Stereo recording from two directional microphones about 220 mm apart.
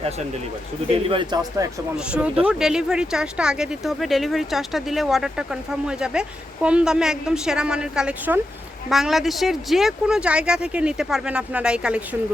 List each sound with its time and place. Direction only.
0.9 s speech: 25° right (ahead or behind)
2.1 s speech: 5° right (ahead or behind)